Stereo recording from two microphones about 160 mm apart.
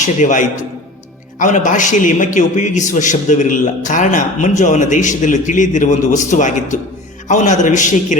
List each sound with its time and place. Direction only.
0.0 s a man's voice: 50° left (ahead or behind)